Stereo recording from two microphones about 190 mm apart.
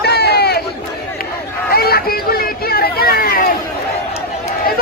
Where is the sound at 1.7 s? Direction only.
50° left (ahead or behind).